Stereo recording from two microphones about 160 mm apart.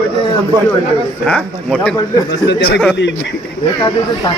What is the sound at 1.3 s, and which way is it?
Speech, 5° left (ahead or behind).